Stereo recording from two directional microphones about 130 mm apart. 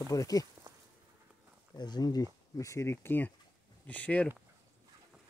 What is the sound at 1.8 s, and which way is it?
Speech, 30° left (ahead or behind).